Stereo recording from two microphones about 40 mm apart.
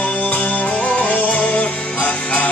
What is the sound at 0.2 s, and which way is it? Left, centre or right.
Music, left.